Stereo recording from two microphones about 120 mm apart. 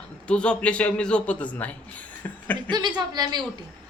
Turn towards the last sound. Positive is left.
turn(degrees=-35)  # may be behind; listen again after turning